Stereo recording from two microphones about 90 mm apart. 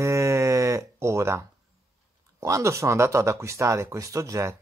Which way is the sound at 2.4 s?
35° right (ahead or behind).